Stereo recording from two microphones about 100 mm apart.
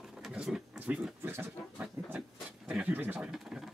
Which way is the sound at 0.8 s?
10° right (ahead or behind).